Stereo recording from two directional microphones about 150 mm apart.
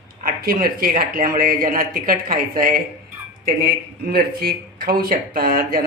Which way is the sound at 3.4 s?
90° right.